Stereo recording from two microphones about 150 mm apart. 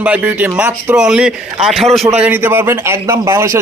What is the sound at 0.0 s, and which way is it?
A man's voice, 10° right (ahead or behind).